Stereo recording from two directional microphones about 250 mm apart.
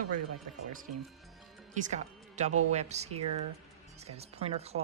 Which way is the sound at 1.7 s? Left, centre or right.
Right.